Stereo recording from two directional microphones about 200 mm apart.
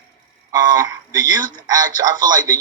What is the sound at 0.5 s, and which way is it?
A man's voice, 20° right (ahead or behind).